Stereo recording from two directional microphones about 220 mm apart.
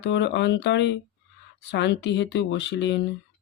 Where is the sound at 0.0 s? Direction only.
50° left (ahead or behind).